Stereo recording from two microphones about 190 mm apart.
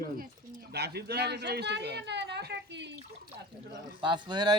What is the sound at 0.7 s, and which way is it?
Speech, 60° right (ahead or behind).